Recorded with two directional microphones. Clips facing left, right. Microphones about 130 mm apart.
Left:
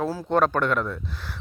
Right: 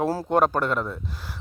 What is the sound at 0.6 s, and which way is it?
Speech, 30° right (ahead or behind).